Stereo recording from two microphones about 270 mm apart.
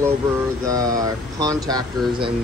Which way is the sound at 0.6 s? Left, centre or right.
Centre.